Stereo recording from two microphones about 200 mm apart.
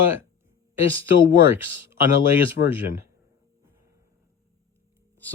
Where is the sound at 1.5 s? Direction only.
10° right (ahead or behind).